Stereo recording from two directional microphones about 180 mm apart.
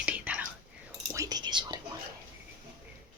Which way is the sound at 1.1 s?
20° right (ahead or behind).